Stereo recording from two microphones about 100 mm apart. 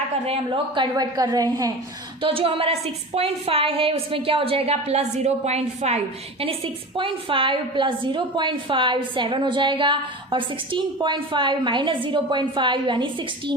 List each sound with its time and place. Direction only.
0.8 s a woman's voice: 40° right (ahead or behind)
2.2 s a woman's voice: 65° right (ahead or behind); by 6.0 s 90° right
6.4 s a woman's voice: 65° right (ahead or behind)